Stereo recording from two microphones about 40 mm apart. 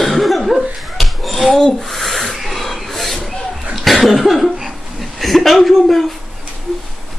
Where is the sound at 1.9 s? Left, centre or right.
Centre.